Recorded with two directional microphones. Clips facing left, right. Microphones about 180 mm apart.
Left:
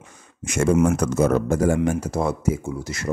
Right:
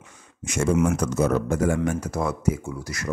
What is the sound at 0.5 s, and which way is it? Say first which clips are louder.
Speech: left 3 dB; 55° left (ahead or behind).